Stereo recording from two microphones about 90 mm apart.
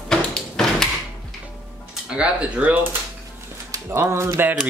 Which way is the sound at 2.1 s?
15° right (ahead or behind).